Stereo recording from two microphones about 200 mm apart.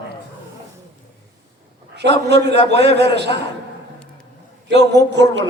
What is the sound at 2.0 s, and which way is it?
A man's voice, 55° right (ahead or behind).